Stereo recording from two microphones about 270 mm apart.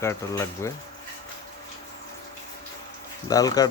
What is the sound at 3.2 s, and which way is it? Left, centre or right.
Speech, centre.